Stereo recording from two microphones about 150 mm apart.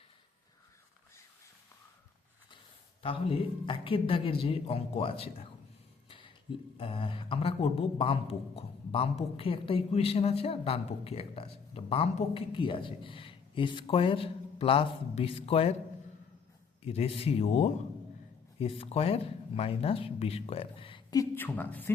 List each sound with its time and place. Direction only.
3.0 s a man's voice: 35° left (ahead or behind)
6.1 s a sound: 35° left (ahead or behind)
6.7 s a man's voice: 35° left (ahead or behind)
16.8 s a man's voice: 40° left (ahead or behind)
21.2 s speech: 15° left (ahead or behind)